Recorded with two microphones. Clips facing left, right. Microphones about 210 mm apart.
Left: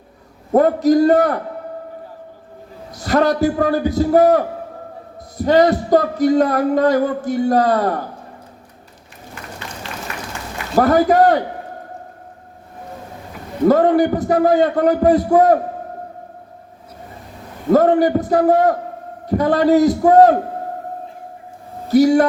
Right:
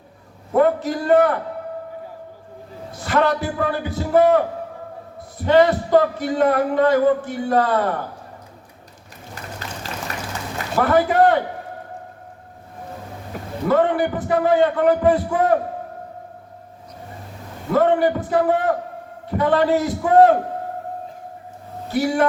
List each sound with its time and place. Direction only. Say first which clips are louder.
0.5 s a man's voice: left 5 dB; 40° left (ahead or behind)
2.9 s a man's voice: left 3 dB; 40° left (ahead or behind)
9.3 s applause: even; 40° right (ahead or behind)
10.8 s a man's voice: left 4 dB; 40° left (ahead or behind)
13.3 s a sound: right 5 dB; 40° right (ahead or behind)
13.7 s a man's voice: left 5 dB; 40° left (ahead or behind)
17.7 s a man's voice: left 4 dB; 40° left (ahead or behind)
21.8 s speech: left 7 dB; 40° left (ahead or behind)